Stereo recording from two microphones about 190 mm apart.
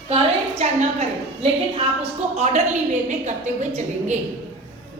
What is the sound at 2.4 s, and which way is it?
A woman's voice, 35° right (ahead or behind).